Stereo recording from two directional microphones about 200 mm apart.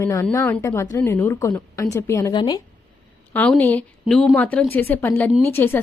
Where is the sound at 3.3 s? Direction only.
5° left (ahead or behind).